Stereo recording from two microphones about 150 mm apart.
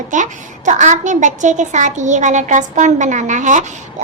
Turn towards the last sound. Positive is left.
turn(degrees=-55)  # may be behind; listen again after turning